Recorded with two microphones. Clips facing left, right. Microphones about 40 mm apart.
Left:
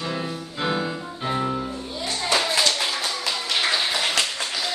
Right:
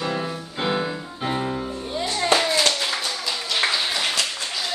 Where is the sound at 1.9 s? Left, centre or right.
Right.